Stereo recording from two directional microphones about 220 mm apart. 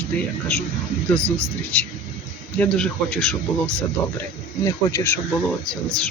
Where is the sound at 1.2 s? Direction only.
10° right (ahead or behind).